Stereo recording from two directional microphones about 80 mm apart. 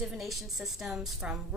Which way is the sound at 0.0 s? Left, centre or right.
Centre.